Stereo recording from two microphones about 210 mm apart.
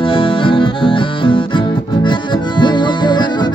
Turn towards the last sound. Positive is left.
turn(degrees=20)  # may be behind; listen again after turning